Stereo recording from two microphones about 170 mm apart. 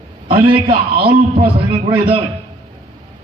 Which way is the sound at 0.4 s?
30° right (ahead or behind).